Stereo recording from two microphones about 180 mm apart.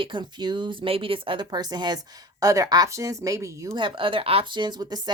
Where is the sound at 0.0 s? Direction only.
25° right (ahead or behind).